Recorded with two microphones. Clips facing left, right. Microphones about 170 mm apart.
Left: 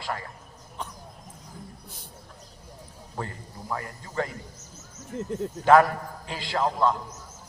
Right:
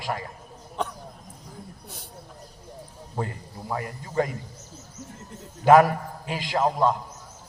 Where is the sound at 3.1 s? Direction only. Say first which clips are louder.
Right 4 dB; 20° right (ahead or behind).